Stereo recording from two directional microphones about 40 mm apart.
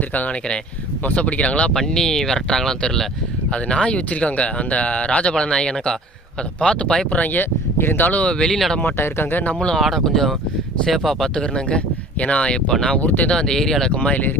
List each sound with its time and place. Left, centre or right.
1.1 s speech: left
1.7 s speech: centre
3.5 s speech: left
8.2 s speech: left
8.8 s speech: left
9.5 s speech: left
9.8 s speech: centre
11.3 s speech: left
13.0 s speech: left
13.3 s speech: centre
13.9 s speech: left